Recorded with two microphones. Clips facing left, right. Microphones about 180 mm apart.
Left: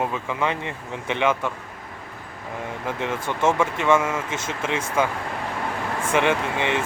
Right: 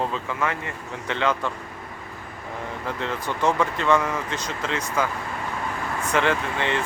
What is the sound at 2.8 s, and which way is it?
Speech, 20° left (ahead or behind).